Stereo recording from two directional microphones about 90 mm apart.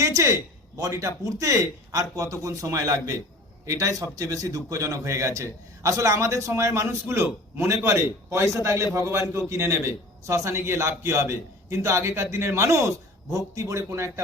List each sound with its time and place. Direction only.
0.0 s a man's voice: 35° right (ahead or behind)